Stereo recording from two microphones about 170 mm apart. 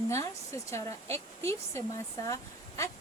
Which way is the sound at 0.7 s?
15° left (ahead or behind).